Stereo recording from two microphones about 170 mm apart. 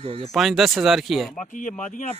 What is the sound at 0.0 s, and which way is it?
Speech, 35° right (ahead or behind).